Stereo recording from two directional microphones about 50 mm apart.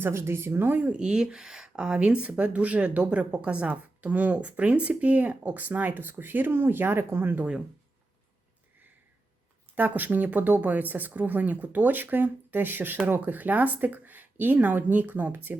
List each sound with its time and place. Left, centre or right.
0.1 s speech: right
0.9 s speech: centre; by 7.4 s right
9.7 s speech: right